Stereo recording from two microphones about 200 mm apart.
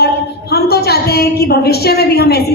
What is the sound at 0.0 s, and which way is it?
A woman's voice, 50° left (ahead or behind).